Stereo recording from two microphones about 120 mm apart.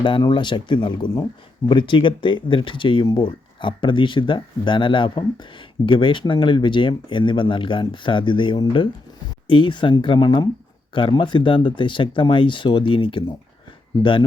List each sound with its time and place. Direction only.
0.0 s speech: 40° left (ahead or behind)